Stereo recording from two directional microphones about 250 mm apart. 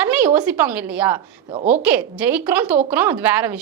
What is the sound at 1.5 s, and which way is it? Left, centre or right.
Speech, right.